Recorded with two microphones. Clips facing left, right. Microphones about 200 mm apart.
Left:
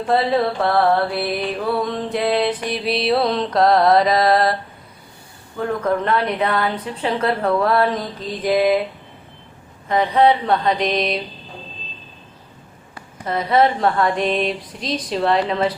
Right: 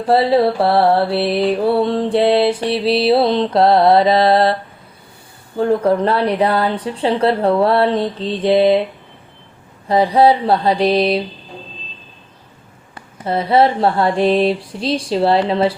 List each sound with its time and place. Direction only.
0.0 s mantra: 35° right (ahead or behind)
5.5 s mantra: 30° right (ahead or behind)
9.9 s mantra: 35° right (ahead or behind)
13.2 s mantra: 30° right (ahead or behind)